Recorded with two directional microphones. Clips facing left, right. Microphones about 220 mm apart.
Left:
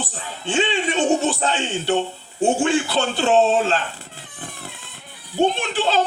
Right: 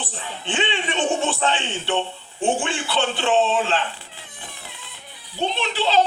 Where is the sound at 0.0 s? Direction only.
40° left (ahead or behind).